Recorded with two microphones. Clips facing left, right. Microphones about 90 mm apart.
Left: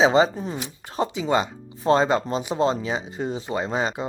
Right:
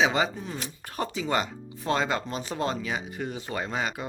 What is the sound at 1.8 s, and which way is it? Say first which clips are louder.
Speech: left 8 dB; 30° left (ahead or behind).